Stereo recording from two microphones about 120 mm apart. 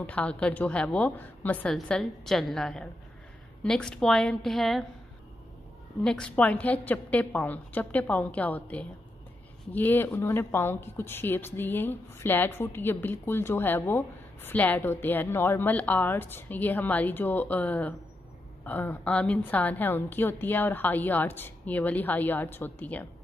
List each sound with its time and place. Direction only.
0.0 s speech: 10° left (ahead or behind)
1.7 s a woman's voice: 5° left (ahead or behind)
6.0 s speech: 10° left (ahead or behind)